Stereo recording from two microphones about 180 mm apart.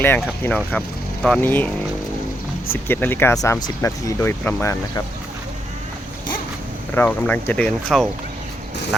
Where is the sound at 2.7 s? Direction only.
10° left (ahead or behind).